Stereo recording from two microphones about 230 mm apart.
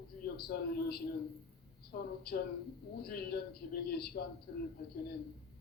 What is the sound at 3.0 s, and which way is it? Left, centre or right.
Speech, left.